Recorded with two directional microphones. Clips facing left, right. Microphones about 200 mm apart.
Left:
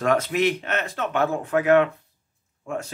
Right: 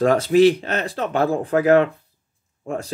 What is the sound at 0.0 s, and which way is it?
Speech, 35° right (ahead or behind).